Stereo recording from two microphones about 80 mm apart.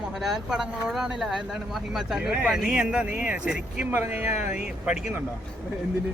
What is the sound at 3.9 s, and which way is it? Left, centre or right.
Speech, right.